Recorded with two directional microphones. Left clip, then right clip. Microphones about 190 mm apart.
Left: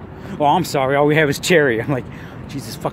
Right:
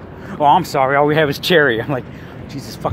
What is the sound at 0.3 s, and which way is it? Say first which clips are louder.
Speech: right 3 dB; 15° left (ahead or behind).